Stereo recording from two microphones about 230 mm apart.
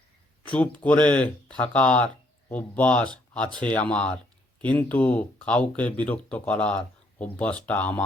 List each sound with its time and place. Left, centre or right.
0.4 s speech: centre